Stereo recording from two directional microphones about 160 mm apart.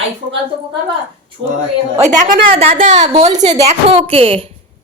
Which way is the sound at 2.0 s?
50° right (ahead or behind).